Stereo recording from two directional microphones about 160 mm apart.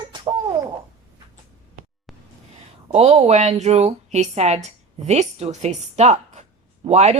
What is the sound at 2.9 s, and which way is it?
A woman's voice, 40° right (ahead or behind).